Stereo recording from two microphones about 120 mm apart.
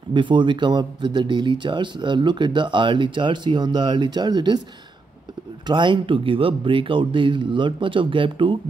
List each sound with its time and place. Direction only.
0.1 s speech: 40° right (ahead or behind)
5.7 s speech: 40° right (ahead or behind)